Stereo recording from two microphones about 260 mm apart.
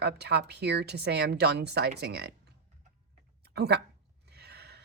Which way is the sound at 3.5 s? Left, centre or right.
Right.